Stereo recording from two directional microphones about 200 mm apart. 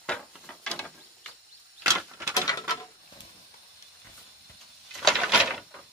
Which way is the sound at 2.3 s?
20° left (ahead or behind).